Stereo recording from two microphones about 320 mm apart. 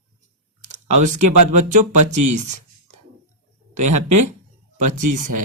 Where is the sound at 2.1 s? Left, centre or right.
Right.